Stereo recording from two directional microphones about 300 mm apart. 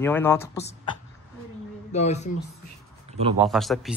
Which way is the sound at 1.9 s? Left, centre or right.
Left.